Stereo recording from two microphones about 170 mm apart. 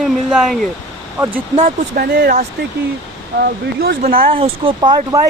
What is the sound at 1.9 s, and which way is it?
Speech, 65° right (ahead or behind).